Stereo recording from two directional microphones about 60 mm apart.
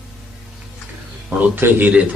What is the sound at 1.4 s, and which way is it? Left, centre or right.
Speech, right.